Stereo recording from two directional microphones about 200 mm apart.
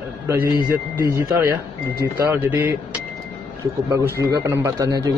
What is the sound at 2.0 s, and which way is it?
Speech, 10° right (ahead or behind).